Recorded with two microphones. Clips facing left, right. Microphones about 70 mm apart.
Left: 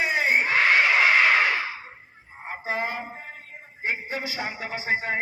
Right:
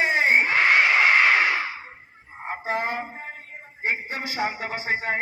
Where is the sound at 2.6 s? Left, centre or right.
Right.